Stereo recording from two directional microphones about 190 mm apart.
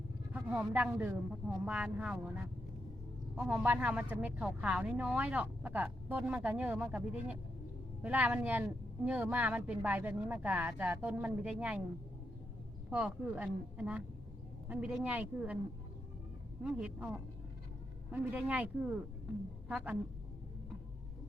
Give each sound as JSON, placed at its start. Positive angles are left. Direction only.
{"t": 0.3, "sound": "a woman's voice", "side_deg": -5}
{"t": 12.9, "sound": "a woman's voice", "side_deg": -5}
{"t": 16.6, "sound": "a woman's voice", "side_deg": -5}